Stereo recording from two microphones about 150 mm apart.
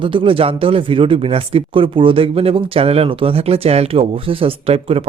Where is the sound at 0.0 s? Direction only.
35° right (ahead or behind).